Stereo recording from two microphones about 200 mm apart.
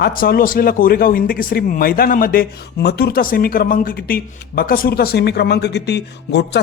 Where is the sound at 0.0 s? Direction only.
45° left (ahead or behind).